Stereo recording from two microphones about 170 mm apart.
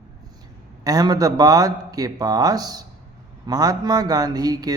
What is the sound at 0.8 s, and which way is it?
Speech, 20° right (ahead or behind).